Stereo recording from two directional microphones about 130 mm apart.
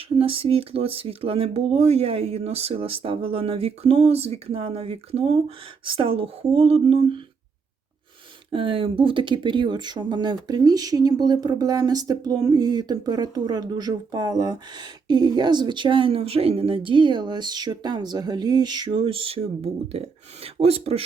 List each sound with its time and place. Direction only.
0.2 s speech: 45° right (ahead or behind)
8.5 s speech: 45° right (ahead or behind)